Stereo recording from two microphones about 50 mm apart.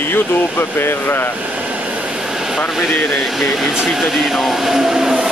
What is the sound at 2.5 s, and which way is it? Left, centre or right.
Speech, centre.